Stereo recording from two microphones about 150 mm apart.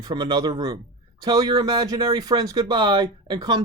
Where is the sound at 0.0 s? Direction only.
30° right (ahead or behind).